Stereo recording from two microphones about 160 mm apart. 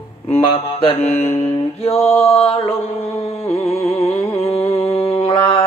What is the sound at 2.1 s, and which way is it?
Mantra, 40° left (ahead or behind).